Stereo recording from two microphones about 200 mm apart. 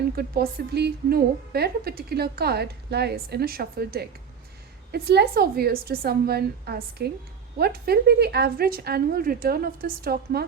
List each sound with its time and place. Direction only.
0.2 s a woman's voice: 55° right (ahead or behind)